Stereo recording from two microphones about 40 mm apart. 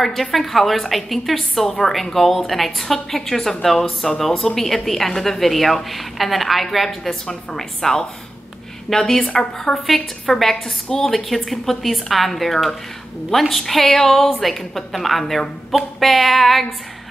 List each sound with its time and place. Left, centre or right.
0.0 s a woman's voice: centre
7.2 s a woman's voice: centre
9.3 s a woman's voice: left; by 16.6 s centre